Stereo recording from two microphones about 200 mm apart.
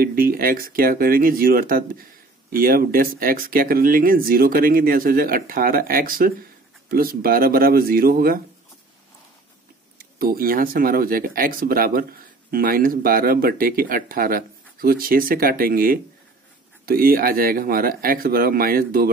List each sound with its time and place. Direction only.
0.0 s speech: 45° right (ahead or behind)
10.1 s speech: 45° right (ahead or behind)